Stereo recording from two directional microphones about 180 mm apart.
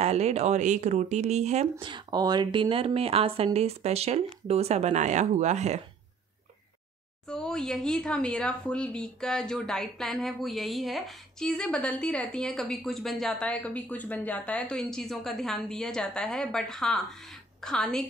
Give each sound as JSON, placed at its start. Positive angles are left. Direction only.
{"t": 0.0, "sound": "speech", "side_deg": -35}
{"t": 7.2, "sound": "speech", "side_deg": 5}